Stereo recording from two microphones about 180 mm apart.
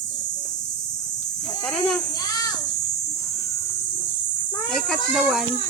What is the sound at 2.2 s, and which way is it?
Speech, 20° left (ahead or behind).